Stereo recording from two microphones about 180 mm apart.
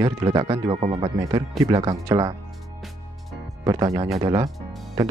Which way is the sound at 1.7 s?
20° right (ahead or behind).